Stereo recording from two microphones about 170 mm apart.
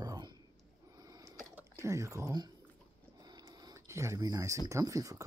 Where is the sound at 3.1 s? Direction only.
25° right (ahead or behind).